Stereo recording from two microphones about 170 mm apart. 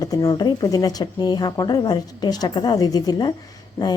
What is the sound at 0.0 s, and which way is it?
A woman's voice, 20° left (ahead or behind).